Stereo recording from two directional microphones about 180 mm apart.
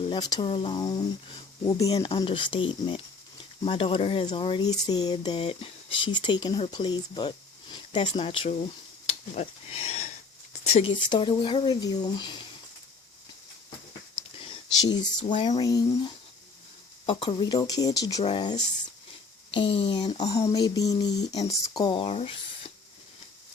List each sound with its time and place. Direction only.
0.0 s speech: 25° left (ahead or behind)
9.0 s a sound: 35° left (ahead or behind)
11.1 s speech: 25° left (ahead or behind)
15.4 s speech: 25° left (ahead or behind)